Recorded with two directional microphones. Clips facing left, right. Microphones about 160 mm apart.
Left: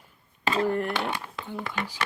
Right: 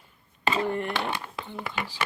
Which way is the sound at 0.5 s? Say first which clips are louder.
Left 3 dB; centre (ahead or behind).